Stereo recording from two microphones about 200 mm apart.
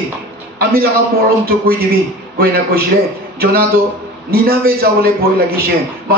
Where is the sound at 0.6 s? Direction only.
50° right (ahead or behind).